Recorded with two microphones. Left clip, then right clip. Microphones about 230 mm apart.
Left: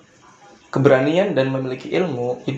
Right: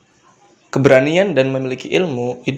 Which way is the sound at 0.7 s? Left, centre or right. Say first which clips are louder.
Right 3 dB; right.